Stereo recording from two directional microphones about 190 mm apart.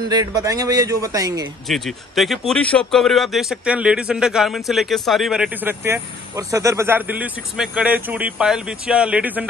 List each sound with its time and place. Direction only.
0.1 s speech: 20° right (ahead or behind)
1.7 s speech: centre (ahead or behind)